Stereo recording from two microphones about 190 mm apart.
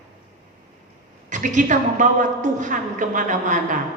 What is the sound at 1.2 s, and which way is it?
A woman's voice, 40° right (ahead or behind).